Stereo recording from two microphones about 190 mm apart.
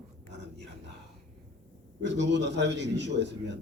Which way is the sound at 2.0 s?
65° right (ahead or behind).